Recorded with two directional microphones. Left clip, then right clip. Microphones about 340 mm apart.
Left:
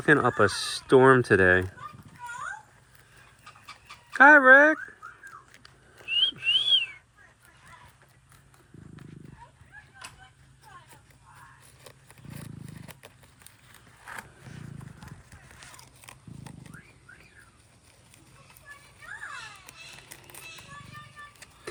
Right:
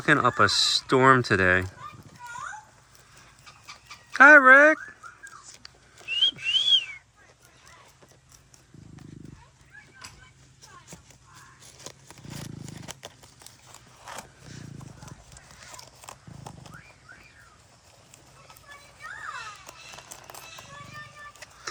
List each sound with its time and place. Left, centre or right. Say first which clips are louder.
0.0 s speech: right 1 dB; centre
4.1 s speech: right 2 dB; centre
5.6 s whistling: even; centre
10.0 s a sound: left 1 dB; left
11.8 s horse: right 9 dB; right
16.0 s horse: right 3 dB; centre
19.6 s run: right 2 dB; centre